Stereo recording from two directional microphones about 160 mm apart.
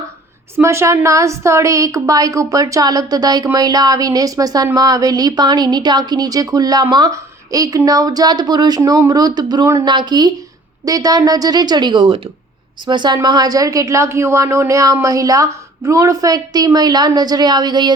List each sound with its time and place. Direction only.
0.5 s a woman's voice: 15° right (ahead or behind)